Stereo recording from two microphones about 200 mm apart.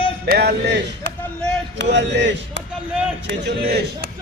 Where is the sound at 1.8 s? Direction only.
65° right (ahead or behind).